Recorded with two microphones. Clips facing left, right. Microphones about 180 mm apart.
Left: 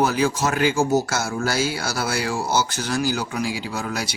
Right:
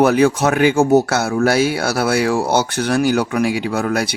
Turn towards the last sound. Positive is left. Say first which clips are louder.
# right 9 dB
turn(degrees=-60)  # may be behind; listen again after turning